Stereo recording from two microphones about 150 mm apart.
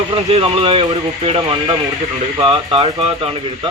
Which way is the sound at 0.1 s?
40° right (ahead or behind).